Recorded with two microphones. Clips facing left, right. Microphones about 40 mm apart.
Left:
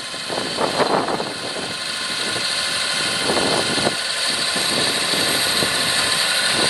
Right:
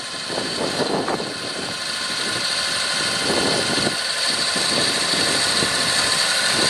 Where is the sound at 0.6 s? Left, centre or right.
Left.